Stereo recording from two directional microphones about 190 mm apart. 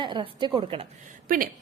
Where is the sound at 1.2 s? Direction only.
45° right (ahead or behind).